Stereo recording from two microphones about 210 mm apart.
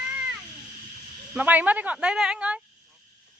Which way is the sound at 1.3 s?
5° right (ahead or behind).